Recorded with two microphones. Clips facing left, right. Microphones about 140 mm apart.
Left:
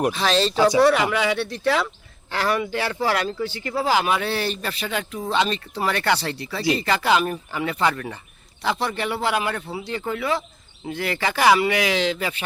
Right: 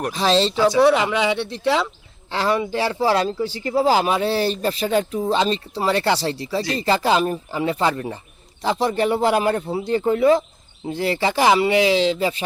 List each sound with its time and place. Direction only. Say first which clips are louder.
0.1 s speech: right 3 dB; 30° right (ahead or behind)
0.5 s speech: even; 15° left (ahead or behind)
1.1 s speech: right 2 dB; 20° right (ahead or behind)